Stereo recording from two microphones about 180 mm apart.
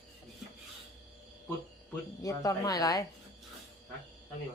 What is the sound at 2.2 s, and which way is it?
Speech, 20° left (ahead or behind).